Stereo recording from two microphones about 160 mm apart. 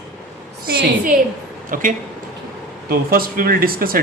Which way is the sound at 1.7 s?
55° right (ahead or behind).